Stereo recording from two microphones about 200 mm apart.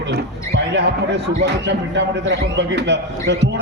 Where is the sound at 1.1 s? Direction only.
60° right (ahead or behind).